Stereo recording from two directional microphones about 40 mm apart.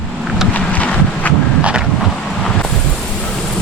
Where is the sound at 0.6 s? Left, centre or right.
Left.